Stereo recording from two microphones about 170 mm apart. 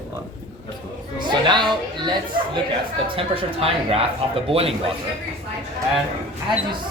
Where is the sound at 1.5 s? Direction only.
25° right (ahead or behind).